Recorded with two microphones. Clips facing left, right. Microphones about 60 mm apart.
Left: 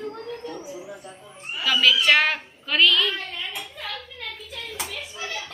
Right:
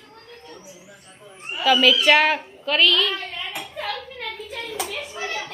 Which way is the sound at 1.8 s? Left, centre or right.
Centre.